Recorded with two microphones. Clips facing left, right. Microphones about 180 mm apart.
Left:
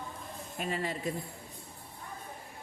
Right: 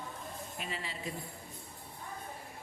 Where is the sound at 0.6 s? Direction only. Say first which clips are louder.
Left 10 dB; 45° left (ahead or behind).